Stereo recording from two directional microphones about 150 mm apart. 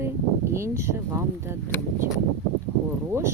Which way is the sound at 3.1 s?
20° right (ahead or behind).